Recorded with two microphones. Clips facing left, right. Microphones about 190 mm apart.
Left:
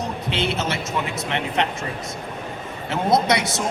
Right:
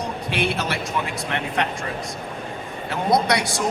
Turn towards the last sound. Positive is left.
turn(degrees=20)  # may be behind; listen again after turning